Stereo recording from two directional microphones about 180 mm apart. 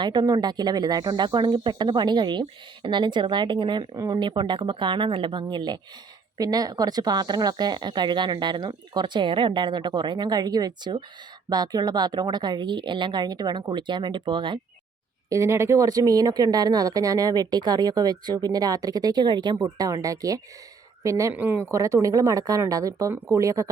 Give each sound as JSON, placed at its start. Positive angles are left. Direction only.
{"t": 0.0, "sound": "speech", "side_deg": -25}